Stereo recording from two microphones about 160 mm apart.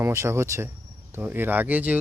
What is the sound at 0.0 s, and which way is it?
Speech, 15° right (ahead or behind).